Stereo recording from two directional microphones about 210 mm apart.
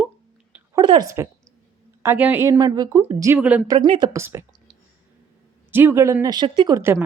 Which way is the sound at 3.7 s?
20° right (ahead or behind).